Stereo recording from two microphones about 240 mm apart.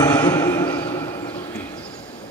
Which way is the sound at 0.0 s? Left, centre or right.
Centre.